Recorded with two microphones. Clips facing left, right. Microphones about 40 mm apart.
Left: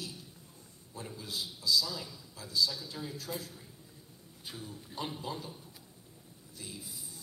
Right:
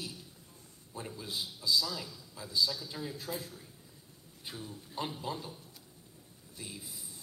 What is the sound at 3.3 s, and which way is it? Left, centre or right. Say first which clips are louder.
Speech: right 1 dB; centre.